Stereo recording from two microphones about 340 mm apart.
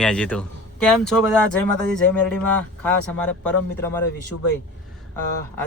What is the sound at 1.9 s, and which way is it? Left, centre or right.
Speech, right.